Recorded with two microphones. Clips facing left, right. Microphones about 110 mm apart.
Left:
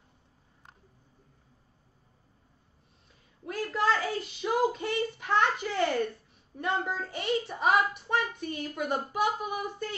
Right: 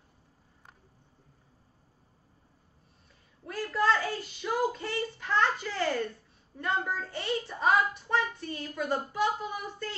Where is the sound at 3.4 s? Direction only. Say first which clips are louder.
Even; 20° left (ahead or behind).